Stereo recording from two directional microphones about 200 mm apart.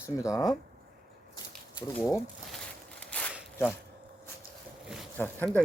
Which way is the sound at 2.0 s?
15° left (ahead or behind).